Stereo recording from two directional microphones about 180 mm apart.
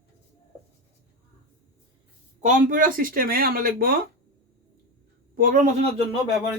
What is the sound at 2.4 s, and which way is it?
Speech, 50° right (ahead or behind).